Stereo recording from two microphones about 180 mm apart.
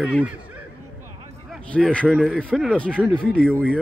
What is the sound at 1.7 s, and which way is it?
A man's voice, 5° left (ahead or behind).